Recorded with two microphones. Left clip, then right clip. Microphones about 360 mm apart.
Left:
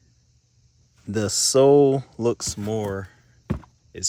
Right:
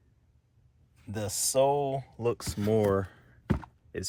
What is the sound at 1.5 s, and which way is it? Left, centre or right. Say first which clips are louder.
Speech: left 10 dB; left.